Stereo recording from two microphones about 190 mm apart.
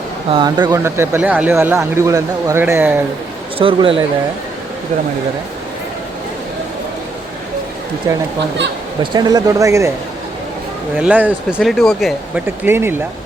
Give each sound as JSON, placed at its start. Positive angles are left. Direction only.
{"t": 0.3, "sound": "speech", "side_deg": -25}
{"t": 0.6, "sound": "speech", "side_deg": -15}
{"t": 3.6, "sound": "speech", "side_deg": -30}
{"t": 9.1, "sound": "speech", "side_deg": -20}
{"t": 10.9, "sound": "speech", "side_deg": -10}
{"t": 12.6, "sound": "speech", "side_deg": -10}